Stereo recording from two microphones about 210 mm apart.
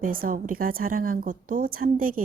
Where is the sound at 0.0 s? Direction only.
40° right (ahead or behind).